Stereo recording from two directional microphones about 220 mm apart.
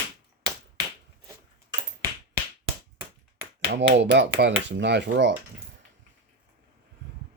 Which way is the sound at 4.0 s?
50° right (ahead or behind).